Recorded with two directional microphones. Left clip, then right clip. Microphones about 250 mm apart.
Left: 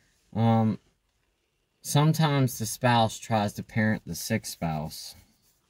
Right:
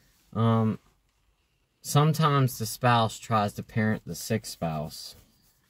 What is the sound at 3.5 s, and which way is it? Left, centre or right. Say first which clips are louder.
Speech: left 1 dB; centre.